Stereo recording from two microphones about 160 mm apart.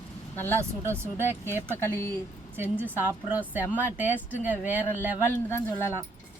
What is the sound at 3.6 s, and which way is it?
Speech, 15° left (ahead or behind).